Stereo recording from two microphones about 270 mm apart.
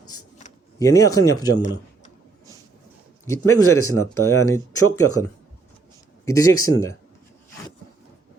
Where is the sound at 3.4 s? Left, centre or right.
Left.